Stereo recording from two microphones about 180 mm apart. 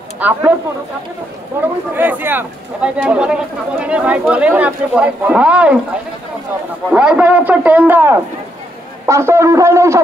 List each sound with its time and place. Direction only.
0.2 s speech: 10° right (ahead or behind)
1.6 s speech: 10° right (ahead or behind)
6.9 s speech: 5° right (ahead or behind)